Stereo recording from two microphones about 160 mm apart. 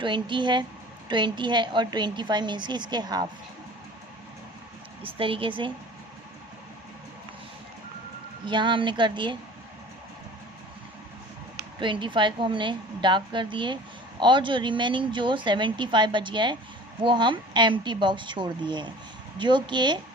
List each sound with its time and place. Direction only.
0.0 s a woman's voice: 30° right (ahead or behind)
5.0 s a woman's voice: 35° right (ahead or behind)
8.4 s a woman's voice: 30° right (ahead or behind)
11.8 s a woman's voice: 30° right (ahead or behind)